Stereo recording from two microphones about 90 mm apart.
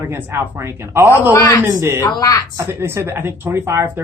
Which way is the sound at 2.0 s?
45° left (ahead or behind).